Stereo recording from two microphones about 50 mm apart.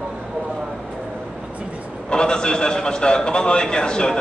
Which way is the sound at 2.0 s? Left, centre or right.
Centre.